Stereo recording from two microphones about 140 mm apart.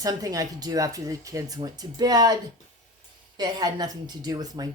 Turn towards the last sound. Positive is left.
turn(degrees=-30)  # may be behind; listen again after turning